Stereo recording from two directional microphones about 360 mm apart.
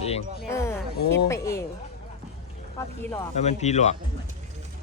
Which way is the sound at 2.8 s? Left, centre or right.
Centre.